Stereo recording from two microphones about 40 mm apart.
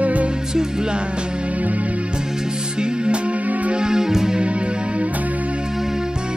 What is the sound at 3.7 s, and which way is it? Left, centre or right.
Music, centre.